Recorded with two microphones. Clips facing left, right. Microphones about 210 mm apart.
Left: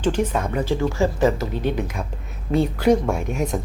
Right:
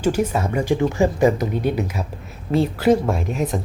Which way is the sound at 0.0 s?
10° right (ahead or behind).